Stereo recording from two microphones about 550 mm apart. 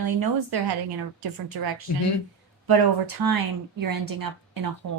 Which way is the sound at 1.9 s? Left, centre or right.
Left.